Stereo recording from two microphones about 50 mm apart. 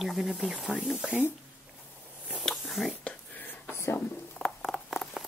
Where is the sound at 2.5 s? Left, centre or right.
Centre.